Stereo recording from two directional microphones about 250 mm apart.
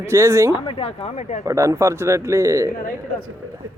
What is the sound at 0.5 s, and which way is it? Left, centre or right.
Speech, left.